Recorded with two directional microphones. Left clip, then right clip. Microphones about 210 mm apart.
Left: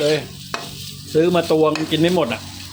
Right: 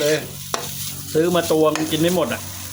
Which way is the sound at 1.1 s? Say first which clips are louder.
Left 2 dB; 15° left (ahead or behind).